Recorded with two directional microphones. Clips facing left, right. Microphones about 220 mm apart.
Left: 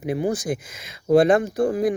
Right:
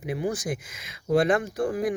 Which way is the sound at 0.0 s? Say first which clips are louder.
Left 5 dB; 30° left (ahead or behind).